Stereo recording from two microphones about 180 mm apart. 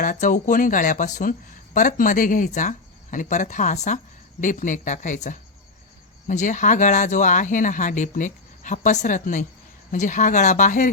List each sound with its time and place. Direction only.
0.0 s speech: 45° left (ahead or behind)